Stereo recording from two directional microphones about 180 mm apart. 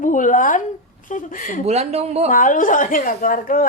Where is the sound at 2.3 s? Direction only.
50° left (ahead or behind).